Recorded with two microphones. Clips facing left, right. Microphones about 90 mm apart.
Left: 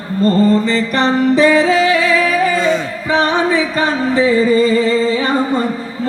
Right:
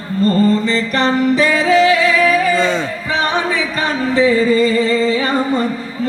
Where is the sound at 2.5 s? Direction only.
30° right (ahead or behind).